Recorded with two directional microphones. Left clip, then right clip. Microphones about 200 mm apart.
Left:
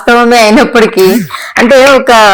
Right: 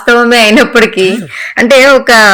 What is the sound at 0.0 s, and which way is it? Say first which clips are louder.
Speech: left 1 dB; 20° right (ahead or behind).